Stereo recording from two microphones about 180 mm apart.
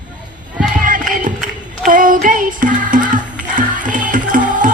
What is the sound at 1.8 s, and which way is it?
Music, 45° right (ahead or behind).